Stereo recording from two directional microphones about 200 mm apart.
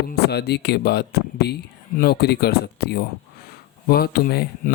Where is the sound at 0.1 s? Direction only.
55° left (ahead or behind).